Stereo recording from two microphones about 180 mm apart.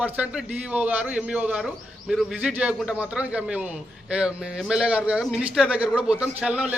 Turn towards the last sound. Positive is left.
turn(degrees=-5)  # may be behind; listen again after turning